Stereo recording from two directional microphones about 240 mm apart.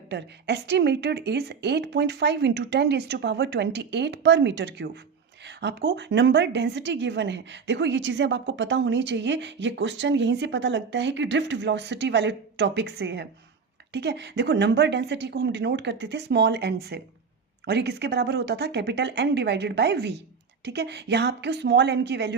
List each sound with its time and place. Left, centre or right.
0.1 s a woman's voice: right